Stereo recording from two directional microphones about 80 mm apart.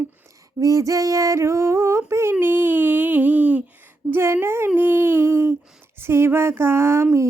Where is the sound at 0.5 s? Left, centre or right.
Right.